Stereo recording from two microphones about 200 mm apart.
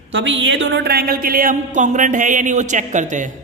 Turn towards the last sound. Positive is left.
turn(degrees=-40)  # may be behind; listen again after turning